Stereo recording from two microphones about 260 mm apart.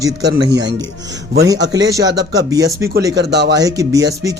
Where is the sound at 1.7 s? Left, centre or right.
Centre.